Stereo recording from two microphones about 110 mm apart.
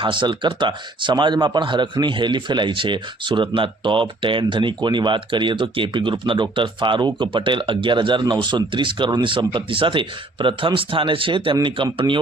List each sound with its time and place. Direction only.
0.0 s speech: 45° right (ahead or behind)